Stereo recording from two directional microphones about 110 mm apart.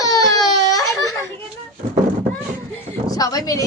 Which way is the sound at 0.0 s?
35° left (ahead or behind).